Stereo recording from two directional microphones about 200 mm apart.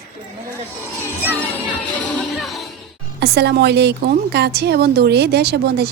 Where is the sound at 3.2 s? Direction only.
55° right (ahead or behind).